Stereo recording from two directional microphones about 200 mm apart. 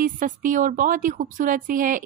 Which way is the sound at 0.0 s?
40° right (ahead or behind).